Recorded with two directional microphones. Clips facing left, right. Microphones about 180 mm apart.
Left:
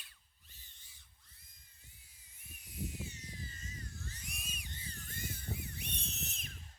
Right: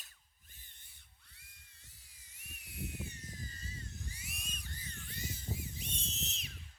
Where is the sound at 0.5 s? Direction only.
55° right (ahead or behind).